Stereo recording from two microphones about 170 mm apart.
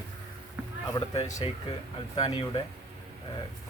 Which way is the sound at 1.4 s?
30° left (ahead or behind).